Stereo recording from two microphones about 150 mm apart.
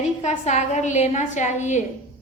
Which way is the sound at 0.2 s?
50° left (ahead or behind).